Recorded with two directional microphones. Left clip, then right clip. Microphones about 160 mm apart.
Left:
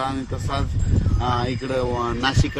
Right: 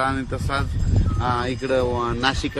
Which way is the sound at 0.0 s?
15° left (ahead or behind).